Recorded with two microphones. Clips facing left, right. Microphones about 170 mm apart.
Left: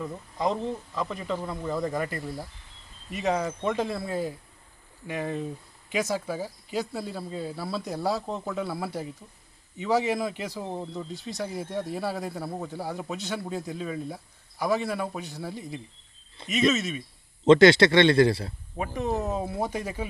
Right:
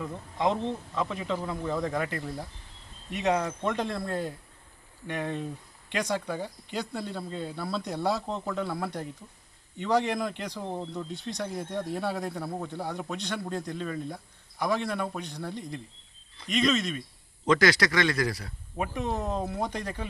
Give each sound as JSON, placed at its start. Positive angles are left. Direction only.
{"t": 0.0, "sound": "speech", "side_deg": 0}
{"t": 17.4, "sound": "speech", "side_deg": 25}
{"t": 18.8, "sound": "speech", "side_deg": 0}